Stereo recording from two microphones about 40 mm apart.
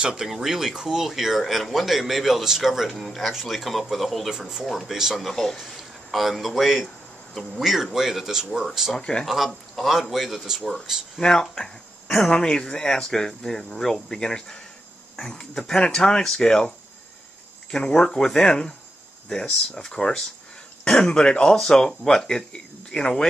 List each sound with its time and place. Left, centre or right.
0.0 s speech: centre
2.9 s speech: centre
4.3 s speech: centre
4.6 s speech: centre
5.6 s speech: centre
8.9 s speech: centre
9.2 s a man's voice: centre
11.1 s speech: centre
19.8 s speech: centre
20.8 s speech: left